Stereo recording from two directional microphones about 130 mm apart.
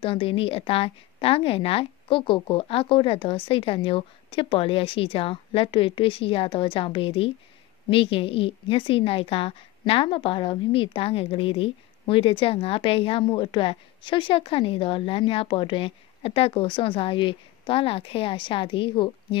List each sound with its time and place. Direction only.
0.0 s a woman's voice: 45° left (ahead or behind)